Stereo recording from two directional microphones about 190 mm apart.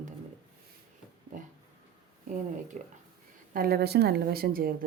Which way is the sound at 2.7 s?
40° right (ahead or behind).